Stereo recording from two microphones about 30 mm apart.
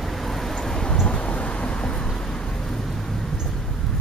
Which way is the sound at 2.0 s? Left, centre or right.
Left.